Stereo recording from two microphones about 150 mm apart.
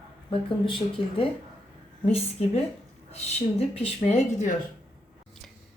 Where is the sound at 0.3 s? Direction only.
35° left (ahead or behind); by 4.5 s 50° left (ahead or behind).